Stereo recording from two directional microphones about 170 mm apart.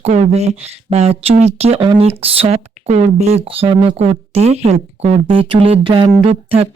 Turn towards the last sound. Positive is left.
turn(degrees=-30)  # may be behind; listen again after turning